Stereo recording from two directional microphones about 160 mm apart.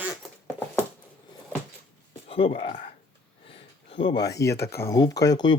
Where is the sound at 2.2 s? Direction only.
35° left (ahead or behind).